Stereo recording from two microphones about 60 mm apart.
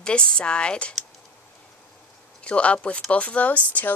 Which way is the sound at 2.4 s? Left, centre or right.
Centre.